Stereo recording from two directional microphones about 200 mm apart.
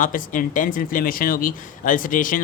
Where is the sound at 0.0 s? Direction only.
40° left (ahead or behind).